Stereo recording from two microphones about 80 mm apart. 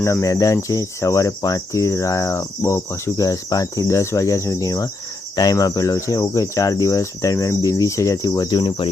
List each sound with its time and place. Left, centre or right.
0.0 s speech: left